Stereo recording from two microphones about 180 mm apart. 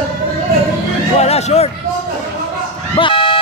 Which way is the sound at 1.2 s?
35° left (ahead or behind).